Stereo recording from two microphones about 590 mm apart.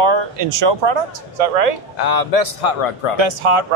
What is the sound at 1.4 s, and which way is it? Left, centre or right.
Speech, right.